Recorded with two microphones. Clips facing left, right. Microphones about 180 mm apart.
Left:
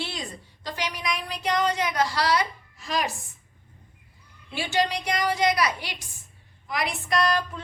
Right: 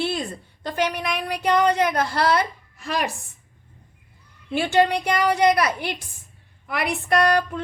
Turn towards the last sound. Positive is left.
turn(degrees=-55)  # may be behind; listen again after turning